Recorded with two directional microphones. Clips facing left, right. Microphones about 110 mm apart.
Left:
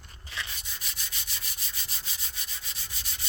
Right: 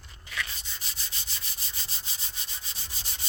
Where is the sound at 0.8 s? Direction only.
30° right (ahead or behind).